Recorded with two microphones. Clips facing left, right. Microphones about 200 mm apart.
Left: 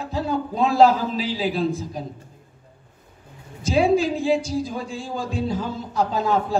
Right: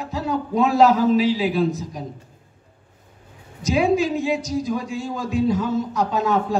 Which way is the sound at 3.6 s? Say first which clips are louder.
Even; 30° left (ahead or behind).